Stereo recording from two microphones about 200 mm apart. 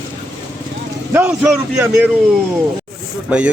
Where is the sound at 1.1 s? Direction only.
5° right (ahead or behind).